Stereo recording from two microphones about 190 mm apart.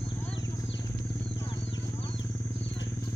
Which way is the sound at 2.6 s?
70° left (ahead or behind).